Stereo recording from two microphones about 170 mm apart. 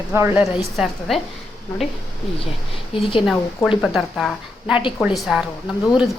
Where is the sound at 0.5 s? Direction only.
Centre (ahead or behind).